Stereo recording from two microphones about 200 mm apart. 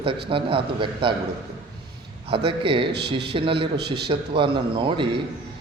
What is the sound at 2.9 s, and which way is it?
Speech, 55° right (ahead or behind).